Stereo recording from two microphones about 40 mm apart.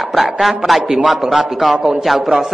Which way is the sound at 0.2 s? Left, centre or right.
Centre.